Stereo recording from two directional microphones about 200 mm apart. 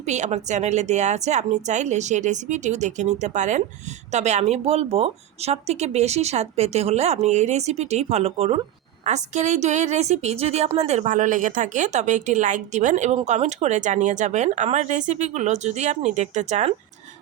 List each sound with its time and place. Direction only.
0.0 s speech: 35° right (ahead or behind)